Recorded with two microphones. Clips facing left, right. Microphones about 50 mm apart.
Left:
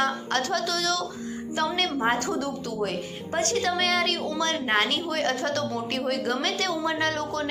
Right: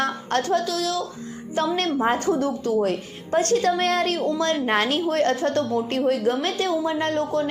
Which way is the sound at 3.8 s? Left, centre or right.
Left.